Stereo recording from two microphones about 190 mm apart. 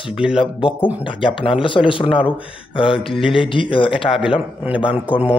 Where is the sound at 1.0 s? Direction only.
25° left (ahead or behind).